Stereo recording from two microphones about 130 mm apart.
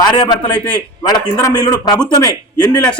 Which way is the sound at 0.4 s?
10° left (ahead or behind).